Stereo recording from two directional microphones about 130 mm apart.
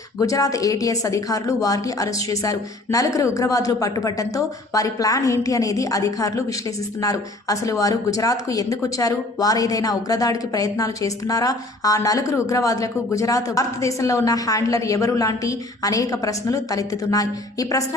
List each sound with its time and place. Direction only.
0.2 s speech: 25° left (ahead or behind)